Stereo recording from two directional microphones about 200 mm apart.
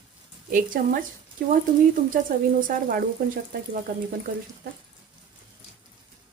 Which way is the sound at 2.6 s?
45° right (ahead or behind).